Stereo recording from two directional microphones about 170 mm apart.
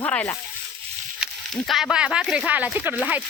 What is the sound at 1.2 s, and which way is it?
Speech, centre (ahead or behind).